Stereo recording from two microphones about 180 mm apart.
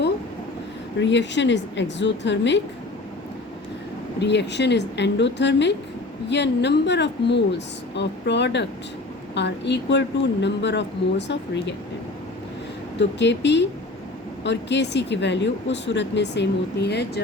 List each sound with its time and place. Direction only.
0.9 s a woman's voice: 90° left
4.2 s speech: 70° left (ahead or behind)
13.0 s speech: 75° left (ahead or behind)